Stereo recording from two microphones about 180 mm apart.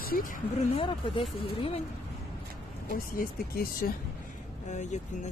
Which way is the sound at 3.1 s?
55° left (ahead or behind).